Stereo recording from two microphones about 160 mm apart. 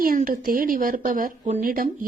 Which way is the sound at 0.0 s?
60° right (ahead or behind).